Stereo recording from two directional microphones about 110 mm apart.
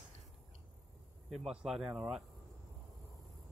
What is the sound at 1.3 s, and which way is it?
Speech, 5° right (ahead or behind).